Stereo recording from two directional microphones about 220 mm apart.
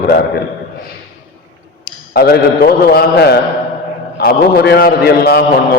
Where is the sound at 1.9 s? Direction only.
45° left (ahead or behind).